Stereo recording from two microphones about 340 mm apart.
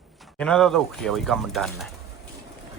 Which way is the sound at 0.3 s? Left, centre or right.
Centre.